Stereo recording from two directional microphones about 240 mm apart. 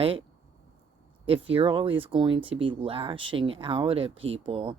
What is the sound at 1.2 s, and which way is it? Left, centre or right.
Speech, right.